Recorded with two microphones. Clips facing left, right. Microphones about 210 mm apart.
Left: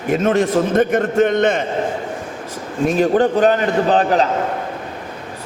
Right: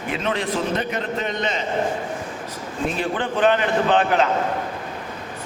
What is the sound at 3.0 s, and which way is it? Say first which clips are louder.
A man's voice: left 8 dB; 40° left (ahead or behind).